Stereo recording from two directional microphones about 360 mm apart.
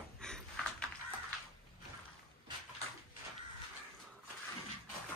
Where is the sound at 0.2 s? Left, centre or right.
Centre.